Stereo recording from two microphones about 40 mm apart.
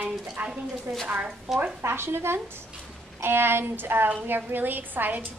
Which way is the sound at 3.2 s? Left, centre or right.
Right.